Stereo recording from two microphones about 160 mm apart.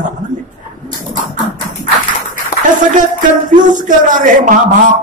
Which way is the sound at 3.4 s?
55° right (ahead or behind).